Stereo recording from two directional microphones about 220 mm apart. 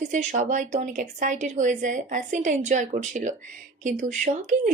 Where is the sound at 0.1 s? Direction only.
35° right (ahead or behind).